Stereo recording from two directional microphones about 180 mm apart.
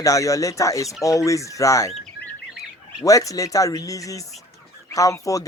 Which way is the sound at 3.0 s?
20° left (ahead or behind).